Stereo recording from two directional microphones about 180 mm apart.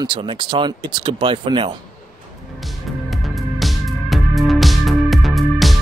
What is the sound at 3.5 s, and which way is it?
Music, centre (ahead or behind).